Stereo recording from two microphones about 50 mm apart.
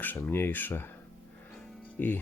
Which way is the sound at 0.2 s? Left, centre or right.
Left.